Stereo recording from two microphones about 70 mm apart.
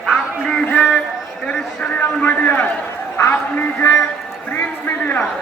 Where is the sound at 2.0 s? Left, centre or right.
Left.